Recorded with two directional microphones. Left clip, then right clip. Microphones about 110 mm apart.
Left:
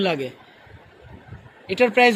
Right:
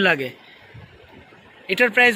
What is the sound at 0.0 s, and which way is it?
Speech, 10° left (ahead or behind).